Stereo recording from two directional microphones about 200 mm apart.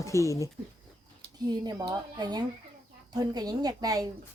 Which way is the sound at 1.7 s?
20° right (ahead or behind).